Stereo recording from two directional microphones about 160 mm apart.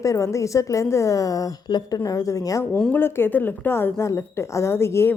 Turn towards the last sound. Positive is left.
turn(degrees=15)  # may be behind; listen again after turning